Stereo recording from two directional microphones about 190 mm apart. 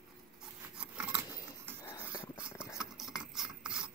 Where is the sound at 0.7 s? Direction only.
5° right (ahead or behind).